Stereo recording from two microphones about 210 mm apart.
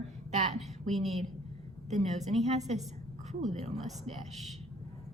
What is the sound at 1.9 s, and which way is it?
Speech, 30° right (ahead or behind).